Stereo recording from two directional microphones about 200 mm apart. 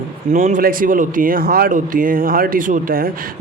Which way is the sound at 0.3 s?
40° right (ahead or behind).